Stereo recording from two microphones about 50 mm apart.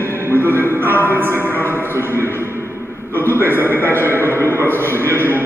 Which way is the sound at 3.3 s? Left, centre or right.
Right.